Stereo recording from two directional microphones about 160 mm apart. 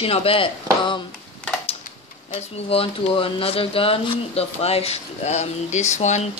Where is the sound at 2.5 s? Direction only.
40° left (ahead or behind).